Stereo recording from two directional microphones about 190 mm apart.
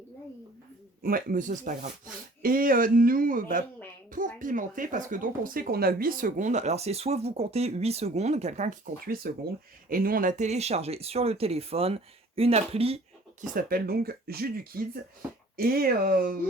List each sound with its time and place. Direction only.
1.0 s speech: 50° right (ahead or behind)
9.0 s speech: 50° right (ahead or behind); by 13.0 s 30° right (ahead or behind)
13.5 s speech: 50° right (ahead or behind)